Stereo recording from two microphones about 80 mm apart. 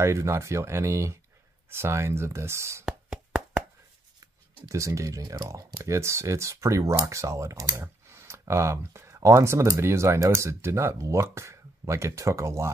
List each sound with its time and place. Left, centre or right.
0.0 s speech: right
2.8 s a sound: centre
4.6 s speech: right